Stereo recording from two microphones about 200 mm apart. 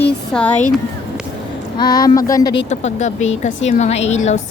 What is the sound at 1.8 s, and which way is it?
Speech, 20° left (ahead or behind).